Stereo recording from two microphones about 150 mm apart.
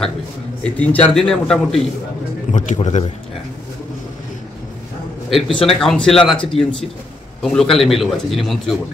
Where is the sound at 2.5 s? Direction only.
50° left (ahead or behind).